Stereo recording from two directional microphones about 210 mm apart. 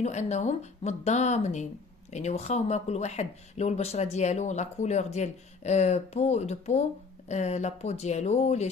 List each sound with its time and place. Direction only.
0.0 s speech: 35° left (ahead or behind)